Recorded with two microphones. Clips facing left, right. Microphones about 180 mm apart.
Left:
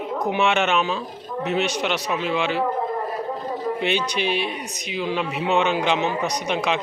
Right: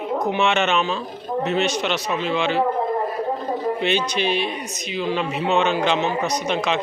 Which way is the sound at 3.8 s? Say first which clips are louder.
Right 2 dB; 10° left (ahead or behind).